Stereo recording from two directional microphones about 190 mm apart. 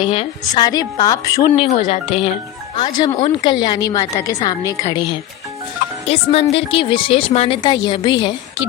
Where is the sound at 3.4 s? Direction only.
25° left (ahead or behind).